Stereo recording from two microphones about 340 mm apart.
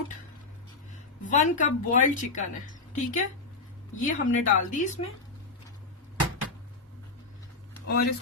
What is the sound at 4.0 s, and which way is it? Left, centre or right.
Speech, left.